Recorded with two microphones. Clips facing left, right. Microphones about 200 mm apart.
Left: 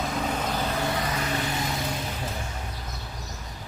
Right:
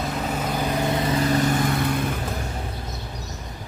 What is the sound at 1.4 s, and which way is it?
Vehicle, 55° right (ahead or behind).